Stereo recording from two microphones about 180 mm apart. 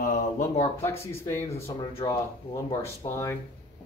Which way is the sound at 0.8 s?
15° left (ahead or behind).